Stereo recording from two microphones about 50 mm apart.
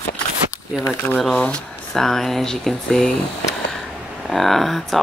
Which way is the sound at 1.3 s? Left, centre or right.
Left.